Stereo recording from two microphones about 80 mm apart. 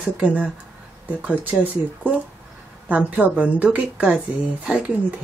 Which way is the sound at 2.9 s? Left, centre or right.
Centre.